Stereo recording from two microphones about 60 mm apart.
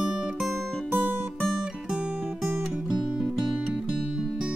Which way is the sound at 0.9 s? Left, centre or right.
Right.